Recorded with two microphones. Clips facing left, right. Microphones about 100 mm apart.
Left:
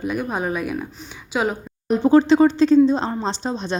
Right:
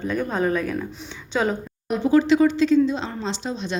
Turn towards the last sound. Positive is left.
turn(degrees=35)  # may be behind; listen again after turning